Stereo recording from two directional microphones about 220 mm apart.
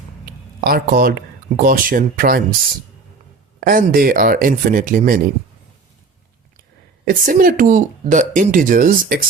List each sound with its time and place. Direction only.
0.6 s speech: 45° right (ahead or behind)
3.6 s speech: 40° right (ahead or behind)
7.0 s speech: 40° right (ahead or behind)